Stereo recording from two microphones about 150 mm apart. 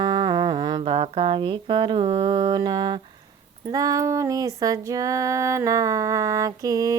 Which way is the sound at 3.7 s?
25° right (ahead or behind).